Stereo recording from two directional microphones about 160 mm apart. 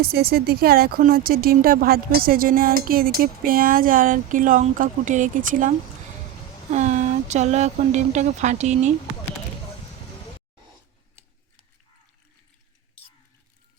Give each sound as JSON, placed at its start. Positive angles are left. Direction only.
{"t": 0.0, "sound": "speech", "side_deg": -75}